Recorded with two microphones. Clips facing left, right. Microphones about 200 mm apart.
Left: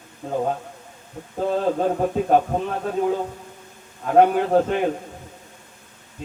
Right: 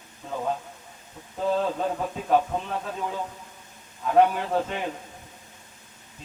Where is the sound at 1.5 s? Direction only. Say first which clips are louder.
Left 9 dB; 50° left (ahead or behind).